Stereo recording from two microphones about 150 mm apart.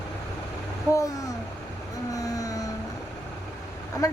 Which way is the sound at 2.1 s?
25° left (ahead or behind).